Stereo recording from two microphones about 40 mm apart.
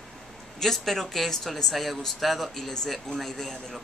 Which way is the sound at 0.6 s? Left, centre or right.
Centre.